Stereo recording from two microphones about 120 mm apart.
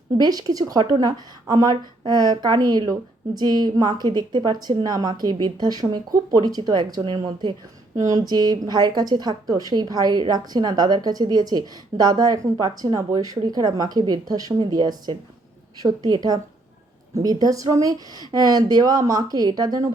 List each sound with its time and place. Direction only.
0.2 s a woman's voice: 35° right (ahead or behind)